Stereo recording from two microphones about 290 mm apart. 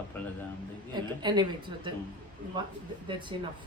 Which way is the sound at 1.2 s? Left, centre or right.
Centre.